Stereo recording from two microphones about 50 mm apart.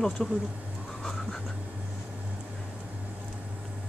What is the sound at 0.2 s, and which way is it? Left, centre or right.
Speech, centre.